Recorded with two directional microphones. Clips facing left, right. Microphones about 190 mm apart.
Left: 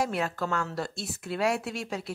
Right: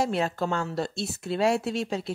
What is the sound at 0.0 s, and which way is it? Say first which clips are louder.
Speech: right 3 dB; 25° right (ahead or behind).